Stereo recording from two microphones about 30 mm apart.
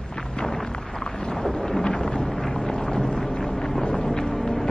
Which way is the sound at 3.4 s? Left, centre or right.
Centre.